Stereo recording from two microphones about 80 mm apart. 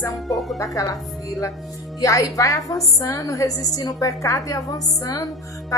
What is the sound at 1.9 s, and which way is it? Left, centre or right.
A woman's voice, left.